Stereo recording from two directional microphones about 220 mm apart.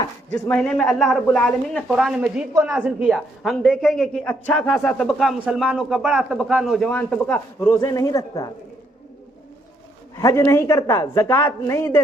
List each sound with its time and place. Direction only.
0.0 s a woman's voice: 15° left (ahead or behind)
10.2 s a woman's voice: 15° left (ahead or behind)